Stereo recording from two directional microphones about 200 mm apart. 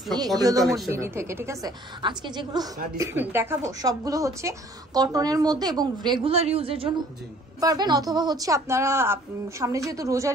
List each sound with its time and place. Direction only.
0.4 s a woman's voice: 20° right (ahead or behind)